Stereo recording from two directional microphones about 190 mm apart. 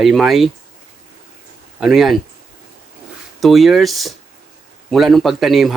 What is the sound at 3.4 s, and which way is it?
Speech, centre (ahead or behind).